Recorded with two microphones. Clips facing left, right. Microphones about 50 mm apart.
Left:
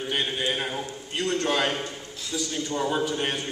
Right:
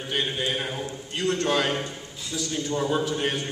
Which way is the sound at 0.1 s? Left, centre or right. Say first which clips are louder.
Right 1 dB; centre.